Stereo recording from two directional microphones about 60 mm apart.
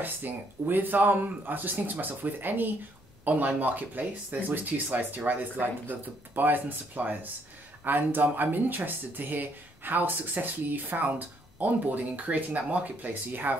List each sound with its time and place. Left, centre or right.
0.0 s speech: right